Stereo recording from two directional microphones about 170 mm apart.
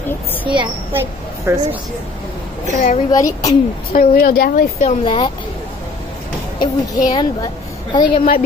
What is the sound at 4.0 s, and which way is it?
Speech, 60° left (ahead or behind).